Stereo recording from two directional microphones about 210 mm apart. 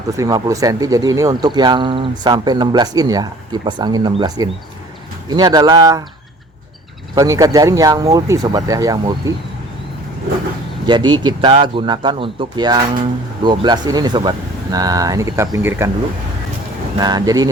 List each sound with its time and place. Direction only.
0.2 s speech: 15° right (ahead or behind)
7.2 s speech: 15° right (ahead or behind)
10.8 s speech: 20° right (ahead or behind)
17.0 s speech: 20° right (ahead or behind)